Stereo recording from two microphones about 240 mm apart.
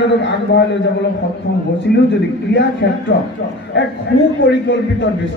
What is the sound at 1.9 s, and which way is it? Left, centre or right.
A man's voice, left.